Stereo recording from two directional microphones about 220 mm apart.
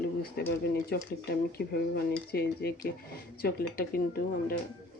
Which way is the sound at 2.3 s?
45° left (ahead or behind).